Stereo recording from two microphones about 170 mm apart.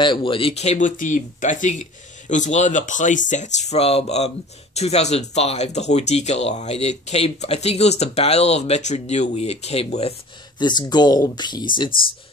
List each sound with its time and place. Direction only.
0.0 s speech: 30° left (ahead or behind)
10.6 s speech: 25° left (ahead or behind)